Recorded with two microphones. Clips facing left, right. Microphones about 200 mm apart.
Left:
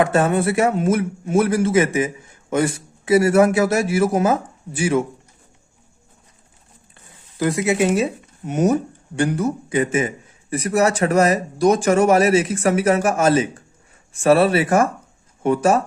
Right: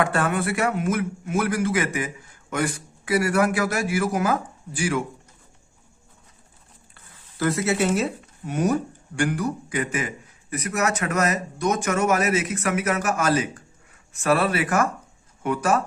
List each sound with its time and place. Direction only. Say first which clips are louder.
0.0 s a man's voice: left 6 dB; 25° left (ahead or behind)
6.9 s a man's voice: left 5 dB; 15° left (ahead or behind)